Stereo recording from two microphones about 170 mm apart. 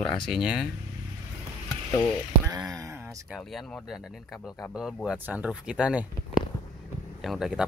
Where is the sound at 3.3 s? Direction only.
Centre (ahead or behind).